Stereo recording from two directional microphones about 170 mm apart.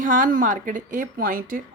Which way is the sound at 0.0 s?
50° right (ahead or behind).